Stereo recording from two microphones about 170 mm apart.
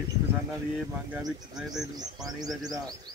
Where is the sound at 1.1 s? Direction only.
5° right (ahead or behind).